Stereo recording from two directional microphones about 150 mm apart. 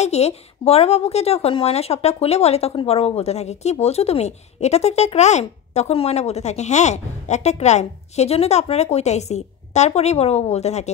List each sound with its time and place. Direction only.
0.0 s speech: 45° left (ahead or behind)